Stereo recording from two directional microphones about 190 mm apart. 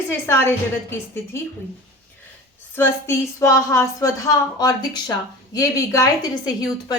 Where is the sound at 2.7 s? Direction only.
10° left (ahead or behind).